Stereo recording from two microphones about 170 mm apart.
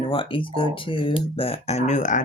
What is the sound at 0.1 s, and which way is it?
Speech, 30° left (ahead or behind).